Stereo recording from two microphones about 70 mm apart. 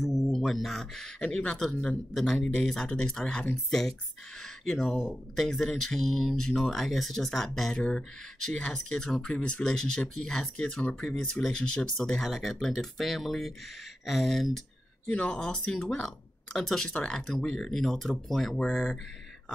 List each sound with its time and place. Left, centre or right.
0.0 s speech: centre
15.0 s speech: centre